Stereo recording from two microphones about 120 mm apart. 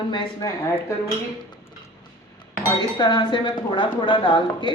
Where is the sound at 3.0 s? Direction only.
40° left (ahead or behind).